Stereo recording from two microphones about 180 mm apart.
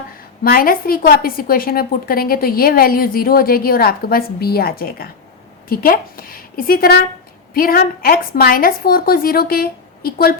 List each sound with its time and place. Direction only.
0.4 s a woman's voice: 55° left (ahead or behind)